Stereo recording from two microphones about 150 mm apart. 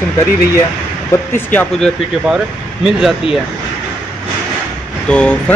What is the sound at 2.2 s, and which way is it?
Speech, 5° right (ahead or behind).